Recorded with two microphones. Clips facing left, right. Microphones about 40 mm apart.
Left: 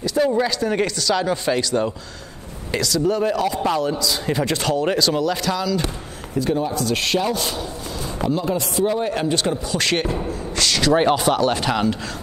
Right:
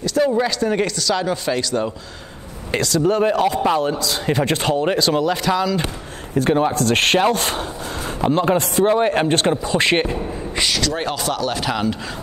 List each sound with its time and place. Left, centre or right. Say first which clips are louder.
0.2 s speech: right 1 dB; centre
0.8 s speech: right 1 dB; left
1.2 s speech: even; centre
2.7 s speech: right 2 dB; right; by 5.8 s centre
6.3 s a man's voice: right 4 dB; right
9.5 s speech: right 4 dB; right
10.8 s speech: left 6 dB; centre
11.6 s speech: left 1 dB; centre